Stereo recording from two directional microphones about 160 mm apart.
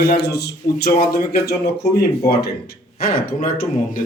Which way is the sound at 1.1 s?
70° left (ahead or behind).